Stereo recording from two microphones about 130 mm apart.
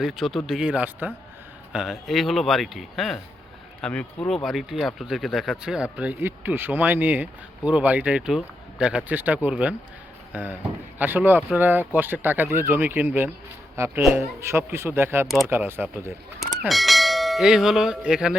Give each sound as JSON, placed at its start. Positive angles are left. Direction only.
{"t": 0.0, "sound": "speech", "side_deg": 0}
{"t": 16.4, "sound": "speech", "side_deg": 0}